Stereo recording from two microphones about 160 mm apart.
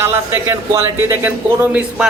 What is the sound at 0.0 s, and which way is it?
A man's voice, 20° right (ahead or behind).